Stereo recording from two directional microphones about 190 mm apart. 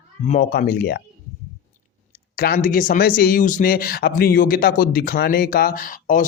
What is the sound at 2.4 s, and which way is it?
Speech, 50° left (ahead or behind).